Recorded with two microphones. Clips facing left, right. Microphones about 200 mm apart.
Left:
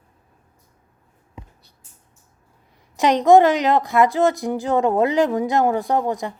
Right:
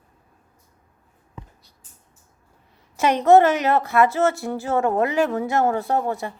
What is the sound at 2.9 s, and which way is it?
A woman's voice, 15° left (ahead or behind).